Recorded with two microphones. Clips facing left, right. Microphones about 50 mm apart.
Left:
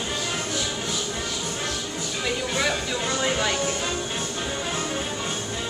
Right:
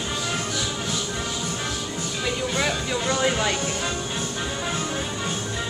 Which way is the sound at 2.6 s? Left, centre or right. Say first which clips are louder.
Even; centre.